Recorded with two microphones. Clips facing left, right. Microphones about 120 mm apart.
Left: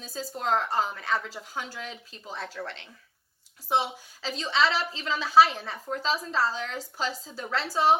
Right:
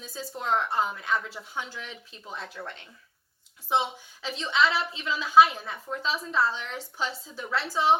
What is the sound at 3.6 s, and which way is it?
Speech, 35° left (ahead or behind).